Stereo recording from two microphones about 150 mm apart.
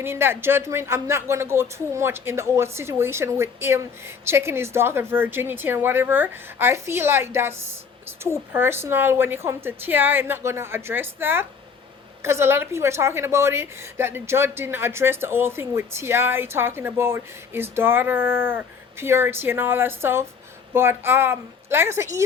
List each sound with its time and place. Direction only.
0.0 s a woman's voice: 15° right (ahead or behind)